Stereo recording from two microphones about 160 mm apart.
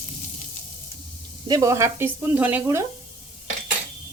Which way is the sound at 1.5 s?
20° right (ahead or behind).